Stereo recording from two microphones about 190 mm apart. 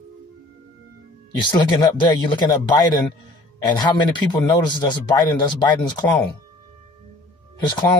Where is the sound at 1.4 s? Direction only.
25° left (ahead or behind).